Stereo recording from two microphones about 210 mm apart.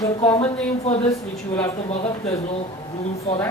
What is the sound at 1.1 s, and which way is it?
Speech, 15° left (ahead or behind).